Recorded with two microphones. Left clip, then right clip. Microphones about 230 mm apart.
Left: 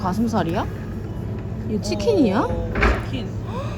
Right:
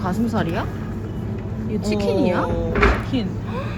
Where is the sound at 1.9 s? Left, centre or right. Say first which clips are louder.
Left 1 dB; left.